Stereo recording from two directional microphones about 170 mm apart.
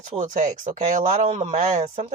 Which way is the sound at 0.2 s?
45° right (ahead or behind).